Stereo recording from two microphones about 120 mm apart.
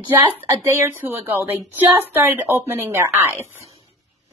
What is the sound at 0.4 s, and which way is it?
A woman's voice, 25° right (ahead or behind).